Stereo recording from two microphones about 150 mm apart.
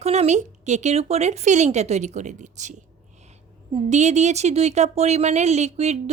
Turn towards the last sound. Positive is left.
turn(degrees=-45)  # may be behind; listen again after turning